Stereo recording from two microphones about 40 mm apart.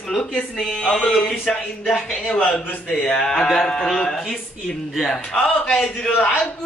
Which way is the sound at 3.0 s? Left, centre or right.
Centre.